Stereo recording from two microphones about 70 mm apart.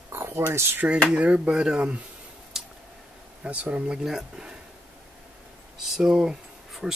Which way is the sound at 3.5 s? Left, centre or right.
Right.